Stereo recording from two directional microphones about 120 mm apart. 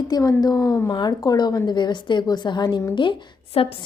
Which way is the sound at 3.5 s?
50° left (ahead or behind).